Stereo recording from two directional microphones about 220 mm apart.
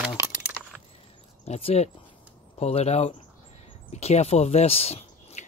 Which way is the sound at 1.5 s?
30° left (ahead or behind).